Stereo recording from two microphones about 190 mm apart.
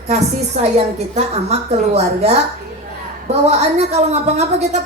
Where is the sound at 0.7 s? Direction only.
35° right (ahead or behind).